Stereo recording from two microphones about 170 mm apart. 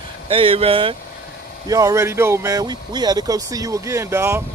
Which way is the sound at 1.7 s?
20° right (ahead or behind).